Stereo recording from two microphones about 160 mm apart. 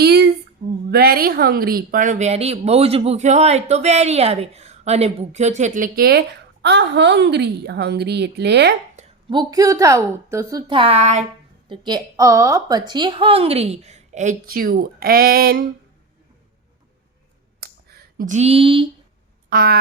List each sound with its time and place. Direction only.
0.0 s female singing: 90° right
0.9 s speech: 75° right (ahead or behind); by 8.7 s 90° right
9.0 s a sound: 45° right (ahead or behind)
9.3 s a woman's voice: 25° right (ahead or behind)
10.7 s a woman's voice: 35° right (ahead or behind)
11.7 s a woman's voice: 30° right (ahead or behind); by 15.6 s 70° right (ahead or behind)
17.6 s a sound: 80° right
18.2 s a woman's voice: 45° right (ahead or behind)
19.5 s a sound: 70° right (ahead or behind)